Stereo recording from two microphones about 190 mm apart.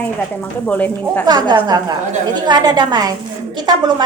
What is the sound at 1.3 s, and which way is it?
A woman's voice, 20° right (ahead or behind).